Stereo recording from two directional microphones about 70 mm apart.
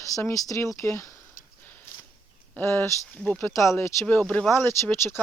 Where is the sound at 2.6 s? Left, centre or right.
Left.